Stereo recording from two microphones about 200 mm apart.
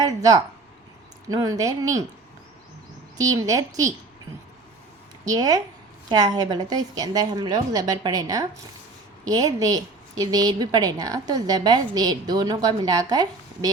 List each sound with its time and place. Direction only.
0.0 s speech: 20° right (ahead or behind)
3.2 s speech: 15° right (ahead or behind)
5.2 s a woman's voice: 20° right (ahead or behind)